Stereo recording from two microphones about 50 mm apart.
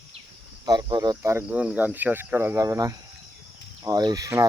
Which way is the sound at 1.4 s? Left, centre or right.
Right.